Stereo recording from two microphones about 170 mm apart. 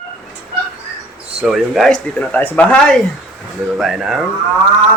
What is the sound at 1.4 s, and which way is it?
Speech, centre (ahead or behind).